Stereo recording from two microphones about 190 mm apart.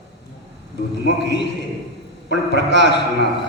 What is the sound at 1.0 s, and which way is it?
A man's voice, 65° left (ahead or behind).